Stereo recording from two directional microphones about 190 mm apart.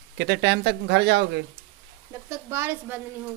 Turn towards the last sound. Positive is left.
turn(degrees=-10)  # may be behind; listen again after turning